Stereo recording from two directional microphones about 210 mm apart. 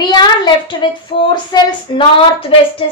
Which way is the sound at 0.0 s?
20° left (ahead or behind).